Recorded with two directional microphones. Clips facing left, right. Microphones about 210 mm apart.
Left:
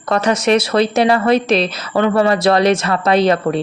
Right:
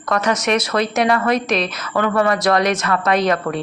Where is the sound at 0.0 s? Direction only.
30° left (ahead or behind).